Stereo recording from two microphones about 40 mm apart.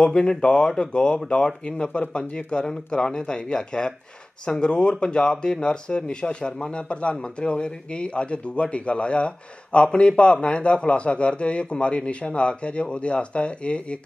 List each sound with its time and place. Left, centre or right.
0.0 s speech: left